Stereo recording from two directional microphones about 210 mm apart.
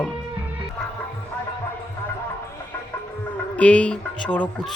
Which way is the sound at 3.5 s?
5° left (ahead or behind).